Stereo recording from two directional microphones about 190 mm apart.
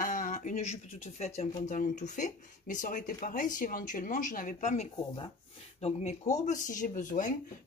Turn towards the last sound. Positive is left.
turn(degrees=45)  # may be behind; listen again after turning